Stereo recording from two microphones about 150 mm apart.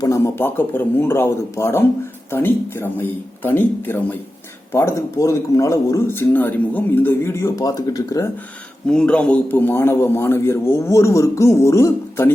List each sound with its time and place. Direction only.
0.0 s a man's voice: 20° left (ahead or behind)
8.9 s a man's voice: 5° left (ahead or behind)